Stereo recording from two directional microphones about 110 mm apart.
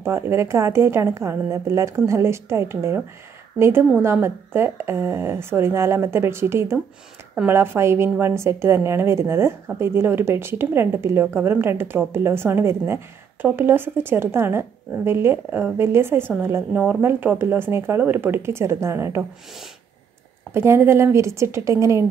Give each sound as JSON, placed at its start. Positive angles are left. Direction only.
{"t": 0.0, "sound": "speech", "side_deg": -25}
{"t": 20.5, "sound": "speech", "side_deg": -20}